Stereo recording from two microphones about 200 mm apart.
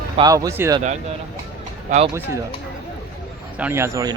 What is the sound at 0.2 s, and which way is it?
Speech, 15° right (ahead or behind).